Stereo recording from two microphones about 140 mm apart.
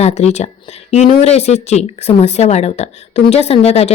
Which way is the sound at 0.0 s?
55° left (ahead or behind).